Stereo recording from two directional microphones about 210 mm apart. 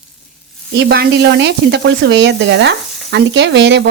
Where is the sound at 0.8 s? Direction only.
50° right (ahead or behind).